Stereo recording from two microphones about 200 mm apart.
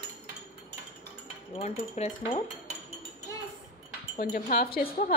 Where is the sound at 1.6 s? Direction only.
35° left (ahead or behind).